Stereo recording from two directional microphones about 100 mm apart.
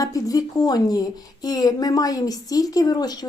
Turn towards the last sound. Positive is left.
turn(degrees=40)  # may be behind; listen again after turning